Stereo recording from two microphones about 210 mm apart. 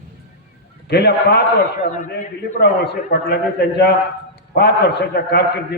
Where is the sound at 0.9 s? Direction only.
50° left (ahead or behind).